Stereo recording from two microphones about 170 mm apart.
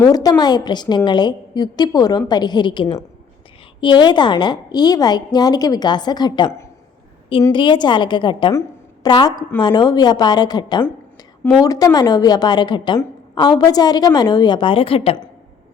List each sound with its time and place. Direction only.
0.0 s a woman's voice: 20° left (ahead or behind)